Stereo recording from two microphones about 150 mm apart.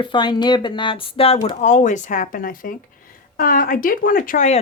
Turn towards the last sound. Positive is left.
turn(degrees=50)  # may be behind; listen again after turning